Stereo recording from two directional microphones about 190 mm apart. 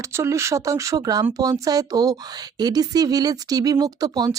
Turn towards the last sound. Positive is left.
turn(degrees=-20)  # may be behind; listen again after turning